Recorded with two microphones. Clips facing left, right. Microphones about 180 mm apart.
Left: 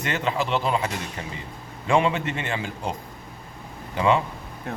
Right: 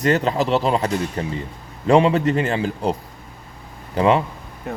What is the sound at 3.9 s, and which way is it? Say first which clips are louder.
Speech: right 4 dB; 35° right (ahead or behind).